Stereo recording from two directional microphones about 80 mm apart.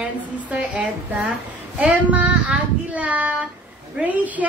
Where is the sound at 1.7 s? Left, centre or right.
Centre.